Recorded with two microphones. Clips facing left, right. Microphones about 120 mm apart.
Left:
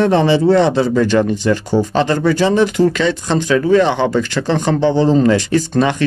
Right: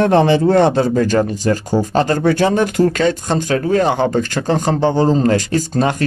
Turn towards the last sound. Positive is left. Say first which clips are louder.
# left 2 dB
turn(degrees=-40)  # may be behind; listen again after turning